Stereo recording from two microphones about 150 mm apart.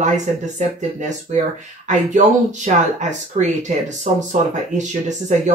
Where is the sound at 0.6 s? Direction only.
55° right (ahead or behind).